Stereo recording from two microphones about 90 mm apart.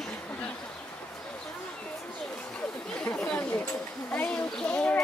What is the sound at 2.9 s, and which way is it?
Chatter, 15° left (ahead or behind).